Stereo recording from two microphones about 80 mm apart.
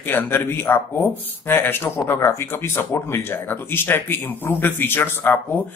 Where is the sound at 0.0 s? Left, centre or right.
Left.